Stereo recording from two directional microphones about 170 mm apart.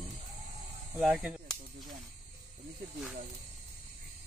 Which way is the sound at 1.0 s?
5° right (ahead or behind).